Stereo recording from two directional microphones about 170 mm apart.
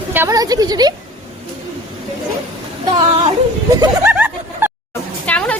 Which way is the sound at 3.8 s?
10° right (ahead or behind).